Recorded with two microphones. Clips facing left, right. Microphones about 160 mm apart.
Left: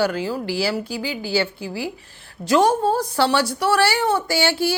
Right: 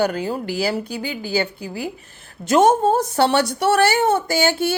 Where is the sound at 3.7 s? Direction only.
50° right (ahead or behind).